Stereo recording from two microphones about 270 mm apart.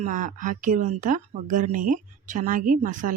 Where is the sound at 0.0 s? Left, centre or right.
Right.